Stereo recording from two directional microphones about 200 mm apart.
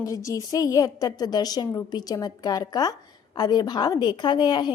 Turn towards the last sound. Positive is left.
turn(degrees=20)  # may be behind; listen again after turning